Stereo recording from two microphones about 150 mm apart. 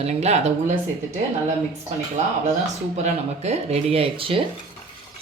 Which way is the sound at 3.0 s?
45° right (ahead or behind).